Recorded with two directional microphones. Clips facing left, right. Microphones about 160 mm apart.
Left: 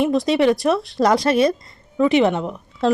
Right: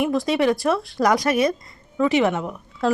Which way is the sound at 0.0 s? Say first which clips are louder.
Left 3 dB; 25° left (ahead or behind).